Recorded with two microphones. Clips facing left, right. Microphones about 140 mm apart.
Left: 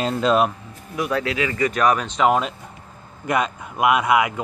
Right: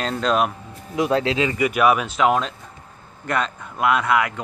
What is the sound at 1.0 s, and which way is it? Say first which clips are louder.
Speech: right 3 dB; 25° right (ahead or behind).